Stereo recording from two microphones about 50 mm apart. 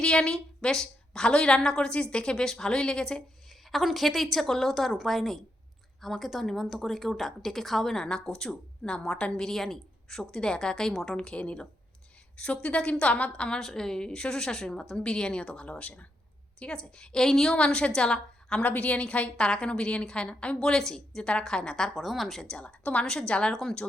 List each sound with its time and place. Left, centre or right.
0.0 s a woman's voice: centre
3.7 s a woman's voice: centre
9.4 s a woman's voice: centre
12.6 s a woman's voice: left
17.6 s a woman's voice: left
18.6 s a woman's voice: left; by 21.9 s centre
21.9 s a woman's voice: centre
22.5 s a woman's voice: left
23.0 s a woman's voice: centre
23.5 s a woman's voice: centre